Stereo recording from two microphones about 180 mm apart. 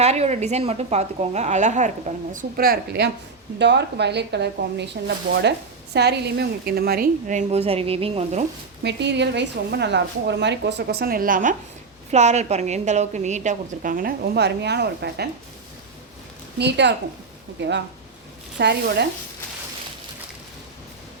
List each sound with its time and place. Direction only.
0.0 s a woman's voice: 35° right (ahead or behind); by 3.1 s 60° right (ahead or behind)
3.6 s speech: 75° right (ahead or behind); by 8.4 s 35° right (ahead or behind)
8.8 s a woman's voice: 75° right (ahead or behind); by 11.5 s 50° right (ahead or behind)
12.1 s a woman's voice: 40° right (ahead or behind); by 15.3 s 65° right (ahead or behind)
16.6 s a woman's voice: 70° right (ahead or behind)
18.6 s a woman's voice: 65° right (ahead or behind)